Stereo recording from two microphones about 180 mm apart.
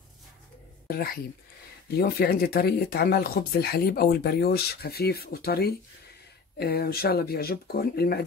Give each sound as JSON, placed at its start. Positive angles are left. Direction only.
{"t": 0.8, "sound": "speech", "side_deg": 55}